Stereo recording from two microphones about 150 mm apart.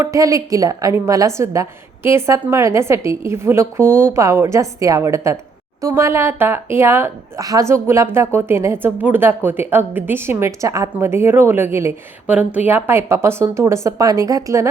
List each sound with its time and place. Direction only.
0.0 s a woman's voice: 20° right (ahead or behind)